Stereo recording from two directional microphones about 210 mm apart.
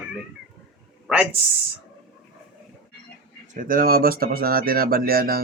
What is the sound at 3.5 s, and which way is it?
Speech, 40° right (ahead or behind).